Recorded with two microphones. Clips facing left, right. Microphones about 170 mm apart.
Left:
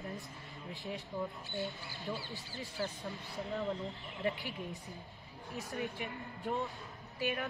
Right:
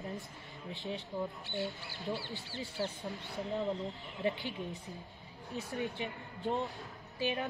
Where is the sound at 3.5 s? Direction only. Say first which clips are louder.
Right 2 dB; 20° right (ahead or behind).